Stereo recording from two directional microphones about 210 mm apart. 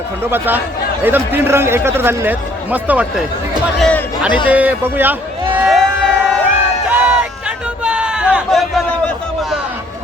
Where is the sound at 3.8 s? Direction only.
5° left (ahead or behind).